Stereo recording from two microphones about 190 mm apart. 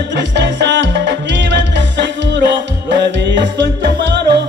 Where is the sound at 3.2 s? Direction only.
65° right (ahead or behind).